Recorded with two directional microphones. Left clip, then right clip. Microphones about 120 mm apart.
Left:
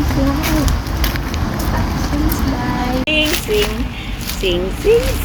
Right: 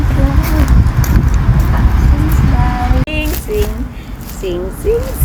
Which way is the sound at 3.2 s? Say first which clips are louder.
Left 2 dB; 90° right.